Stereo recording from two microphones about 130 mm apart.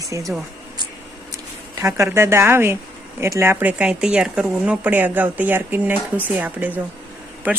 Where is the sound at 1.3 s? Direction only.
25° right (ahead or behind).